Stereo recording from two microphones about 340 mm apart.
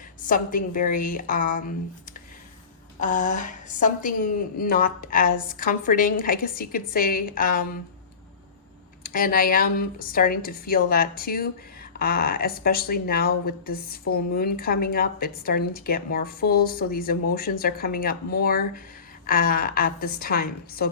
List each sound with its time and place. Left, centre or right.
0.3 s speech: left
3.0 s speech: left
9.0 s speech: left